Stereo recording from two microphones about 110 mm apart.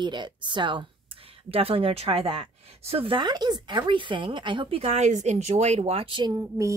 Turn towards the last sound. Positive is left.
turn(degrees=-45)  # may be behind; listen again after turning